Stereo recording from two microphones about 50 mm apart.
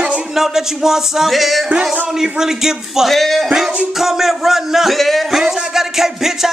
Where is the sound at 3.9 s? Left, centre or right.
Centre.